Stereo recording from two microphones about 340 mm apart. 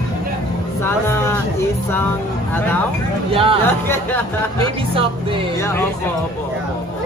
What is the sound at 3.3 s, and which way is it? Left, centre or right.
Speech, centre.